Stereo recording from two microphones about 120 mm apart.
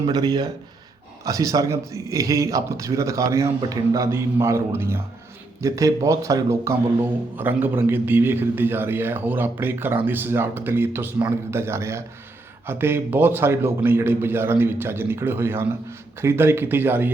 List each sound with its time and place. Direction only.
0.0 s a man's voice: 35° right (ahead or behind); by 17.1 s 20° right (ahead or behind)